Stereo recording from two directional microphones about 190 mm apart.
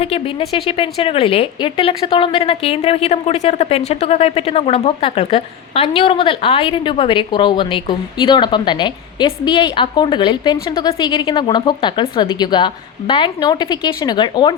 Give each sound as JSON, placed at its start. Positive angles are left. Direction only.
{"t": 0.0, "sound": "a woman's voice", "side_deg": 30}